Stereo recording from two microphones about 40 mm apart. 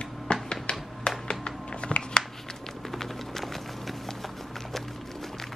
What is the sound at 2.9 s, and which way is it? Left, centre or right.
Music, centre.